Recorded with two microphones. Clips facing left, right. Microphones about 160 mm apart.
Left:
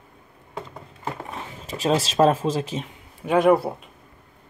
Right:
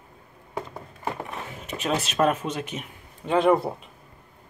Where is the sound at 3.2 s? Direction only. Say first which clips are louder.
Left 3 dB; 10° left (ahead or behind).